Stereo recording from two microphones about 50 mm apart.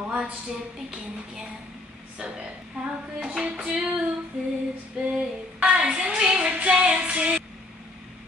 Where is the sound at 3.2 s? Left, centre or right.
Centre.